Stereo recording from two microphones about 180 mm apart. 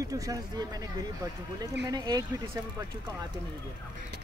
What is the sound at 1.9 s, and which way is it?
Speech, 20° right (ahead or behind).